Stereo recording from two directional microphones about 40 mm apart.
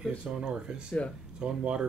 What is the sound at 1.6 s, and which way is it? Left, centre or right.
Speech, right.